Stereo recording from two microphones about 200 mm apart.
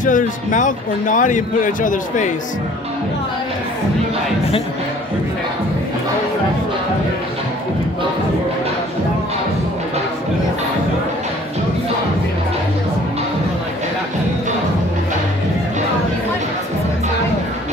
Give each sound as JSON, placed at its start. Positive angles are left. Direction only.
{"t": 0.0, "sound": "speech", "side_deg": 40}